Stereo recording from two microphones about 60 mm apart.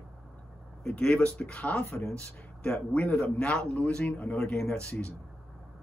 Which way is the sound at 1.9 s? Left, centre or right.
Left.